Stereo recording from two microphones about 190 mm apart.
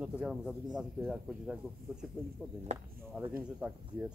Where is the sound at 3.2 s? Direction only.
5° right (ahead or behind).